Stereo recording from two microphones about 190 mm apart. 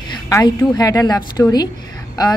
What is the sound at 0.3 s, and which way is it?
A woman's voice, 20° left (ahead or behind).